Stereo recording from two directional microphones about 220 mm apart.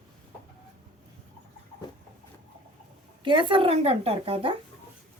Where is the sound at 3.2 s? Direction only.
20° right (ahead or behind).